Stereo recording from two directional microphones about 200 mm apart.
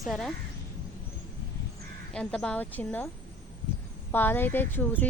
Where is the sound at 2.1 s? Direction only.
5° left (ahead or behind).